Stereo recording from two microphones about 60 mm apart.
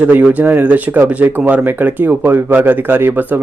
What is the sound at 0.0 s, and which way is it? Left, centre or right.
A man's voice, right.